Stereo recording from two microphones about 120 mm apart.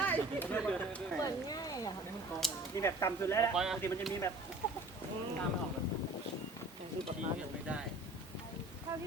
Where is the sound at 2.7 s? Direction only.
25° left (ahead or behind).